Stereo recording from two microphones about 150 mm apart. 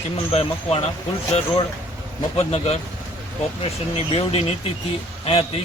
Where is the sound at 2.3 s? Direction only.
45° left (ahead or behind).